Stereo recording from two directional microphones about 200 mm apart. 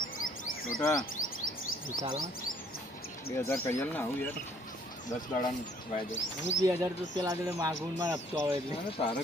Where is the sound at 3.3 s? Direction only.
15° left (ahead or behind).